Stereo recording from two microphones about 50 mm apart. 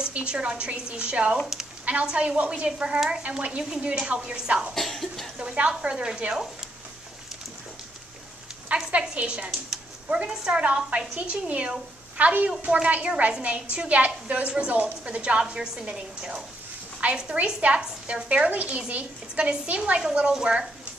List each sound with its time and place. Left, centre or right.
0.1 s a woman's voice: right
4.7 s a sound: centre
5.4 s a woman's voice: right
8.7 s a woman's voice: right
20.0 s a woman's voice: centre